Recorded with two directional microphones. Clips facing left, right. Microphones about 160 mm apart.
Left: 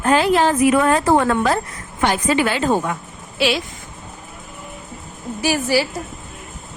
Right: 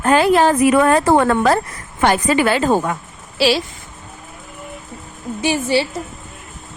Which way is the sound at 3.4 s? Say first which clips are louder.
Right 3 dB; 30° right (ahead or behind).